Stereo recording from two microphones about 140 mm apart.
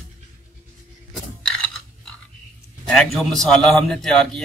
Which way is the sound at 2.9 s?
5° left (ahead or behind).